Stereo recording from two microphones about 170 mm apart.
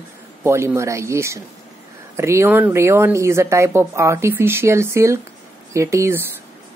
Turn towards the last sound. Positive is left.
turn(degrees=-15)  # may be behind; listen again after turning